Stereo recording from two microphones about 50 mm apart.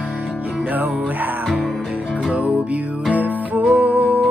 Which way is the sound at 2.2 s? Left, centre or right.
Right.